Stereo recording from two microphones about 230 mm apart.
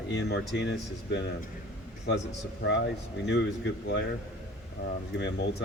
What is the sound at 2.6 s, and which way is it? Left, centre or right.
Speech, left.